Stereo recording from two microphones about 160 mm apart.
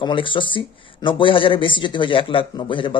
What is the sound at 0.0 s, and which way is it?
A man's voice, 30° left (ahead or behind).